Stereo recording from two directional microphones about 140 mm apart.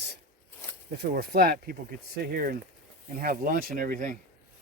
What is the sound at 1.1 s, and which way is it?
Speech, 90° right.